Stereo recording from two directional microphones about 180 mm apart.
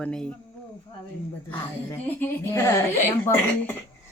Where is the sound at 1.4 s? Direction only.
10° left (ahead or behind).